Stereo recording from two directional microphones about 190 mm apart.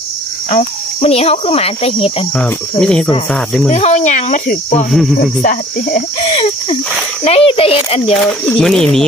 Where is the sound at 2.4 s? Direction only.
5° left (ahead or behind).